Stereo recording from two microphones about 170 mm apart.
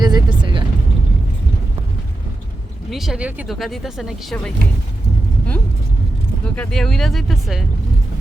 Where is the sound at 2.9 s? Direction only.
Centre (ahead or behind).